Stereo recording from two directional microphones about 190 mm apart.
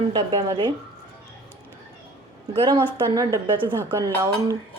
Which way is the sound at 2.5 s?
25° right (ahead or behind).